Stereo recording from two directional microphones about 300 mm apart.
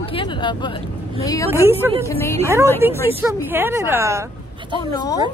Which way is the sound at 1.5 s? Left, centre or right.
Centre.